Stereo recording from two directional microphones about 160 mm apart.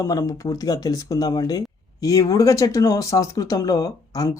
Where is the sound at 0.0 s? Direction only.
20° left (ahead or behind).